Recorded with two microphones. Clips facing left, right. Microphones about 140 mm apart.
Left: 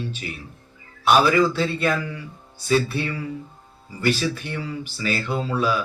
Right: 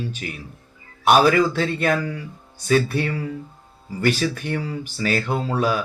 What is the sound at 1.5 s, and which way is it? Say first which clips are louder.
Speech: right 2 dB; 50° right (ahead or behind).